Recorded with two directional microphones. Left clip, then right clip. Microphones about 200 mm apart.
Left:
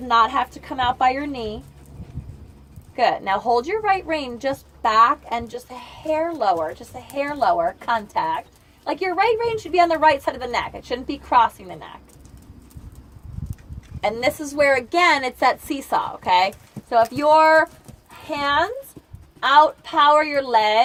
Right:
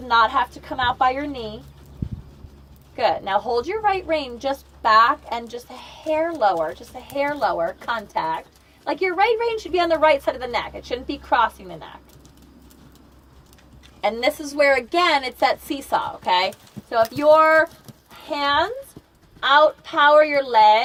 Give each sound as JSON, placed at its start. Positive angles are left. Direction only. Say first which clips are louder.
{"t": 0.1, "sound": "a woman's voice", "louder": "even", "side_deg": 45}
{"t": 2.9, "sound": "a woman's voice", "louder": "left 1 dB", "side_deg": 45}
{"t": 14.0, "sound": "a woman's voice", "louder": "even", "side_deg": 40}